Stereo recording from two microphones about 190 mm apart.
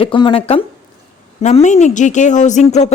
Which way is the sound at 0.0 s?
25° left (ahead or behind).